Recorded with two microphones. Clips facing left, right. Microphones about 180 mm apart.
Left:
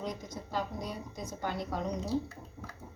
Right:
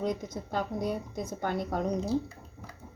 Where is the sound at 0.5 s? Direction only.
55° right (ahead or behind).